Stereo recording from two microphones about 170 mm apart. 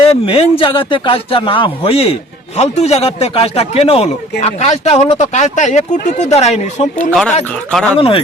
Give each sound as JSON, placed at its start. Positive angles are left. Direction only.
{"t": 0.0, "sound": "speech", "side_deg": 35}
{"t": 7.1, "sound": "speech", "side_deg": 5}
{"t": 7.9, "sound": "speech", "side_deg": 35}